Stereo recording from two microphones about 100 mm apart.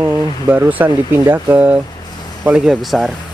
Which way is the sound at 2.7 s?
Centre (ahead or behind).